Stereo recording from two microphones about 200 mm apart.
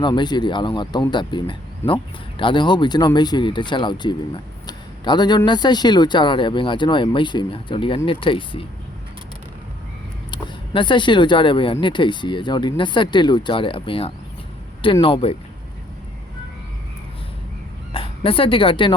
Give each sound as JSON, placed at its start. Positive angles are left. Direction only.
{"t": 0.0, "sound": "speech", "side_deg": 20}
{"t": 4.6, "sound": "a sound", "side_deg": 20}
{"t": 5.5, "sound": "speech", "side_deg": 20}
{"t": 10.3, "sound": "speech", "side_deg": 25}
{"t": 17.9, "sound": "speech", "side_deg": 25}